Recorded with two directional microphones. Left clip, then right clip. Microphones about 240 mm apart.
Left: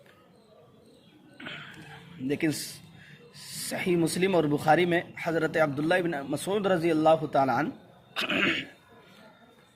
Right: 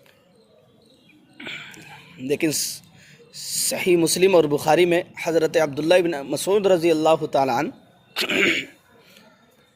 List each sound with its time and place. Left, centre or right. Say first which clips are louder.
1.4 s a sound: right 6 dB; right
3.7 s speech: right 8 dB; right
8.1 s throat clearing: right 7 dB; right